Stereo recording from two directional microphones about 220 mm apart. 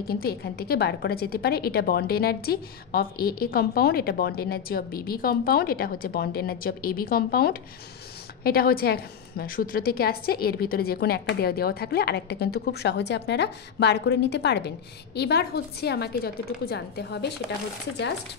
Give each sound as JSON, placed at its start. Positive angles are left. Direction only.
{"t": 0.1, "sound": "a woman's voice", "side_deg": 45}